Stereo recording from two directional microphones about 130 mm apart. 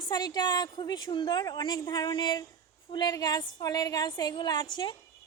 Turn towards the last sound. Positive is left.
turn(degrees=35)  # may be behind; listen again after turning